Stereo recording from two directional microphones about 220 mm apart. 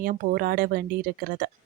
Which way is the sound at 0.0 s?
40° right (ahead or behind).